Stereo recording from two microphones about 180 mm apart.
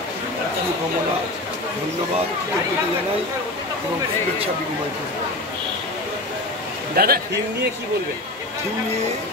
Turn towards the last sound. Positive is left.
turn(degrees=-55)  # may be behind; listen again after turning